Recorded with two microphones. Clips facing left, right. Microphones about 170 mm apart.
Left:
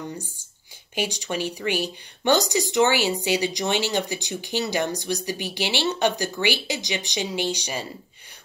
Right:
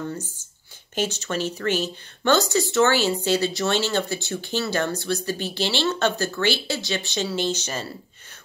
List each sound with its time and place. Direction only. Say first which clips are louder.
0.0 s speech: right 3 dB; 15° left (ahead or behind)